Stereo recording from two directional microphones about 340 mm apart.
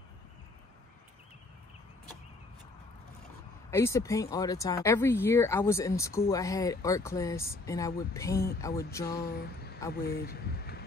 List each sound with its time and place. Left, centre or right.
3.7 s speech: centre
9.9 s speech: left